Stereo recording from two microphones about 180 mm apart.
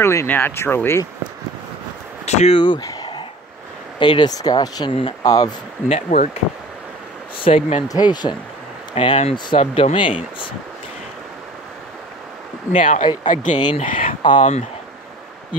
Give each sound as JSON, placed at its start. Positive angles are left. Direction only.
{"t": 0.0, "sound": "speech", "side_deg": 15}
{"t": 2.2, "sound": "speech", "side_deg": 35}
{"t": 5.9, "sound": "speech", "side_deg": 35}
{"t": 8.9, "sound": "speech", "side_deg": 35}
{"t": 12.7, "sound": "speech", "side_deg": 45}